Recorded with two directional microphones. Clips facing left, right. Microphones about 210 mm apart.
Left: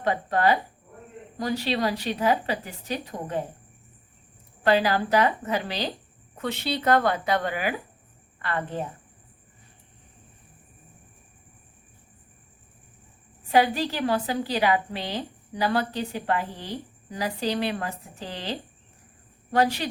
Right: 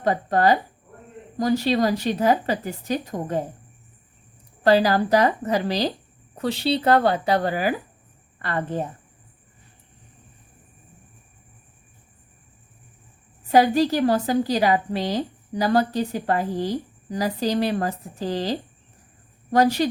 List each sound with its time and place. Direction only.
0.0 s a woman's voice: 40° right (ahead or behind)
4.6 s a woman's voice: 40° right (ahead or behind)
13.5 s a woman's voice: 40° right (ahead or behind)